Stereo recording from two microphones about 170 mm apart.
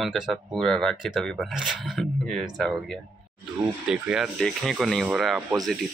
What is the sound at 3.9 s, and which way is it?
Speech, 5° right (ahead or behind).